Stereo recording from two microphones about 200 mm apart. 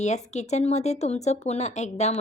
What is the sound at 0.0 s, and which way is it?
A woman's voice, 35° left (ahead or behind).